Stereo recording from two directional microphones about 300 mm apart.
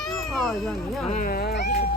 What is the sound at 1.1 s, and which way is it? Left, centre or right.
Cat, left.